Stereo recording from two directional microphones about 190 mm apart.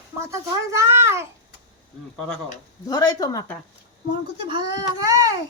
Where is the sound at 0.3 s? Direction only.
15° right (ahead or behind).